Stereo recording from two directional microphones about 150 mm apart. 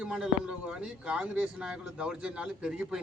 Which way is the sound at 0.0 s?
5° right (ahead or behind).